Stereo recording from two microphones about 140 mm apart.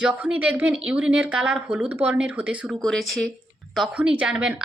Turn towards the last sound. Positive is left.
turn(degrees=-5)  # may be behind; listen again after turning